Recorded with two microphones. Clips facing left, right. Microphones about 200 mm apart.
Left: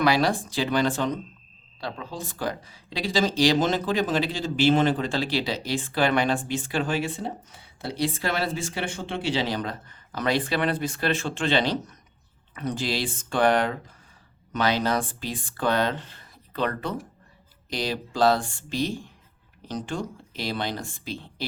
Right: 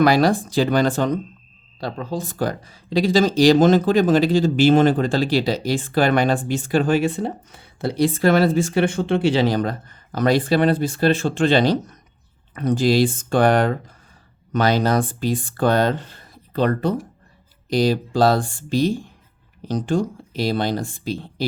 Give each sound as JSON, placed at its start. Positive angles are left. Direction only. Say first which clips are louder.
{"t": 0.0, "sound": "speech", "louder": "right 6 dB", "side_deg": -45}